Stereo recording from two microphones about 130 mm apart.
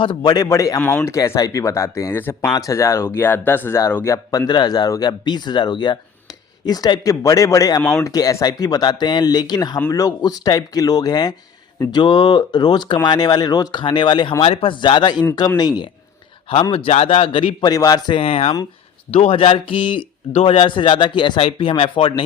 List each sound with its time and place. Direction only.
0.0 s speech: 40° left (ahead or behind)
0.8 s speech: 10° left (ahead or behind)
1.0 s speech: 20° left (ahead or behind)
7.8 s speech: 10° left (ahead or behind)
8.0 s a man's voice: 25° left (ahead or behind)
16.7 s speech: 45° left (ahead or behind)
17.7 s a man's voice: 30° left (ahead or behind)
18.2 s a man's voice: 50° left (ahead or behind)